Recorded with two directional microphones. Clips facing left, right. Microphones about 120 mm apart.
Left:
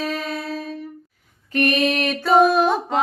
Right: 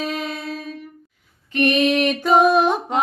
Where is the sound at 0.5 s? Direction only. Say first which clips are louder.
Left 2 dB; 35° left (ahead or behind).